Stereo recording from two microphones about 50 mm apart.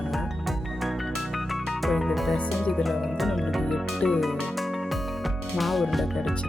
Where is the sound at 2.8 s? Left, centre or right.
Centre.